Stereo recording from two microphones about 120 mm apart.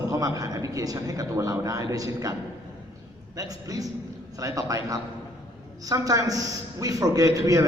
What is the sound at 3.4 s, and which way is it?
A man's voice, 30° right (ahead or behind).